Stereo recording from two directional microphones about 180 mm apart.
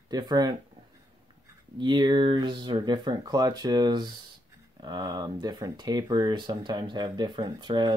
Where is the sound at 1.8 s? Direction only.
25° right (ahead or behind).